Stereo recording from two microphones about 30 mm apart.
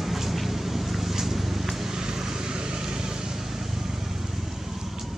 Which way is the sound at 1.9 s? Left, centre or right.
Right.